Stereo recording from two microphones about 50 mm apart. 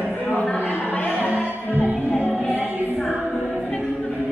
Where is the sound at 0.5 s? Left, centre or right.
Left.